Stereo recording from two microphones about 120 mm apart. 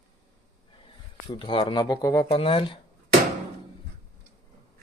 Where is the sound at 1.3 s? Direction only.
40° left (ahead or behind).